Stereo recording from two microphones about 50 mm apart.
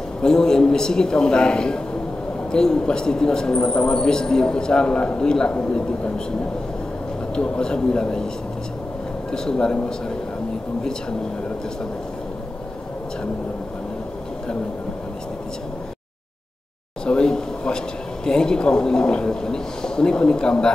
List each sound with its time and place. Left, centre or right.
0.2 s a man's voice: centre
7.3 s speech: centre
9.3 s speech: centre
17.0 s speech: centre